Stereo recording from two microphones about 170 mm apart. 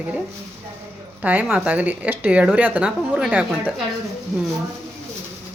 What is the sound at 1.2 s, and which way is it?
Speech, 10° right (ahead or behind).